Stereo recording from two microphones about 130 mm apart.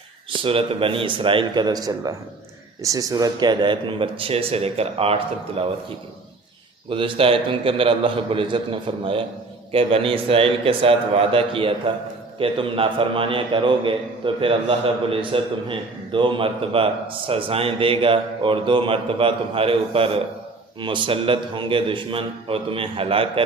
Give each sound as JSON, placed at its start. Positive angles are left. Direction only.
{"t": 0.3, "sound": "a man's voice", "side_deg": -40}
{"t": 6.9, "sound": "a man's voice", "side_deg": -40}